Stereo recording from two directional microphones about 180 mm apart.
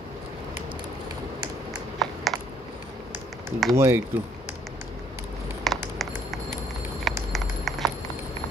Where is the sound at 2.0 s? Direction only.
Centre (ahead or behind).